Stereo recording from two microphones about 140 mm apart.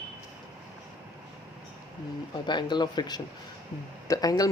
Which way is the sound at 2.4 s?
30° left (ahead or behind).